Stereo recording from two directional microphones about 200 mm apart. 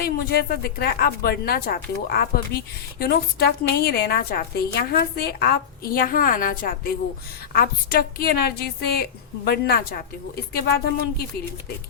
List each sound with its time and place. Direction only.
0.0 s a woman's voice: 50° left (ahead or behind)